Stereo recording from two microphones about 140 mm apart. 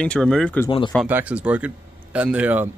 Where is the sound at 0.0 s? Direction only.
5° left (ahead or behind).